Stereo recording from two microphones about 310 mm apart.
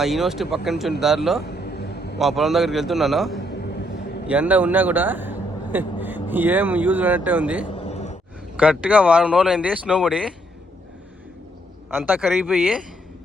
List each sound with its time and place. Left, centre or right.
0.0 s speech: centre
1.5 s a sound: left
2.1 s a man's voice: centre
7.8 s sigh: left
8.5 s speech: centre
11.9 s speech: centre